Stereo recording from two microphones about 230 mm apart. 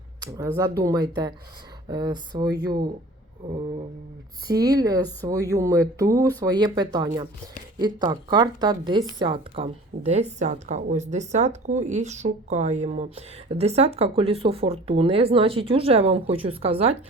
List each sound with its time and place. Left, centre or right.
0.3 s a woman's voice: centre
4.5 s a woman's voice: centre